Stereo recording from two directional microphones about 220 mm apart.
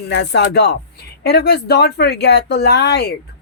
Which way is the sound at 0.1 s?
50° left (ahead or behind).